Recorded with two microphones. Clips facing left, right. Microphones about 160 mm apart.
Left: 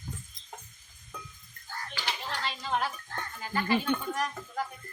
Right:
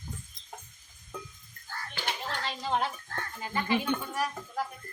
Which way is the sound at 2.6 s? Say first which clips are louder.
Right 2 dB; 20° right (ahead or behind).